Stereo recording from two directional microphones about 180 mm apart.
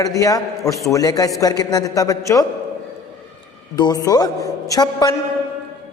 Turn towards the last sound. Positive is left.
turn(degrees=20)  # may be behind; listen again after turning